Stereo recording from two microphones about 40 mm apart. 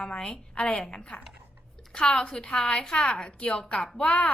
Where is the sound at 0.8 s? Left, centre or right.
Centre.